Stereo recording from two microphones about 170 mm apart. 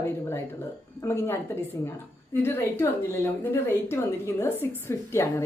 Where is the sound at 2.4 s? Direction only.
15° left (ahead or behind).